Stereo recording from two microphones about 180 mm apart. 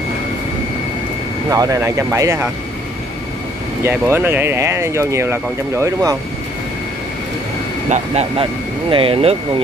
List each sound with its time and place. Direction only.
1.5 s speech: 20° right (ahead or behind)
3.8 s speech: 10° right (ahead or behind)
7.9 s speech: 35° right (ahead or behind)